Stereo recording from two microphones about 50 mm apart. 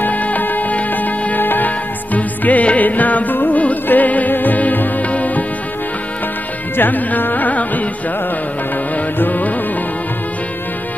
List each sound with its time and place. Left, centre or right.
0.0 s music: left
6.8 s carnatic music: left
8.9 s music: left